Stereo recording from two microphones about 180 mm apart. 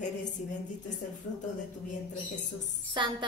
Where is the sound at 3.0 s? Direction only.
25° right (ahead or behind).